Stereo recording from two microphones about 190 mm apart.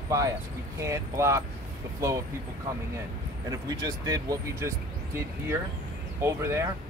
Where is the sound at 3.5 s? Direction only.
20° right (ahead or behind).